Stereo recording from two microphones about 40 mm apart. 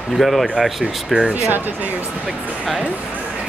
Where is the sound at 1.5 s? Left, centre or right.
Right.